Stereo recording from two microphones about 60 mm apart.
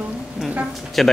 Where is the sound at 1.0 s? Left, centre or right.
Centre.